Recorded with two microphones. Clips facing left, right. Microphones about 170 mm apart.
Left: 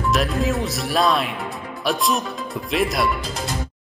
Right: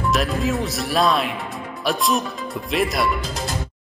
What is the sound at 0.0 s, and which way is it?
Speech, centre (ahead or behind).